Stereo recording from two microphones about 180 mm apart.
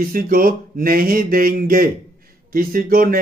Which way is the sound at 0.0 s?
55° right (ahead or behind).